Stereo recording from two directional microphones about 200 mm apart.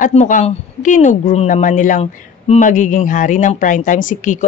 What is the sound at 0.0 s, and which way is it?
Speech, 40° left (ahead or behind).